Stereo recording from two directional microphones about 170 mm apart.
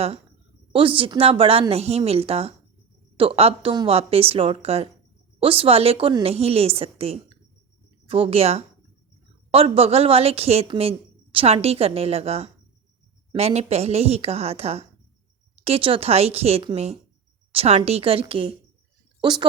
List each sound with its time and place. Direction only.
0.7 s a woman's voice: 30° right (ahead or behind)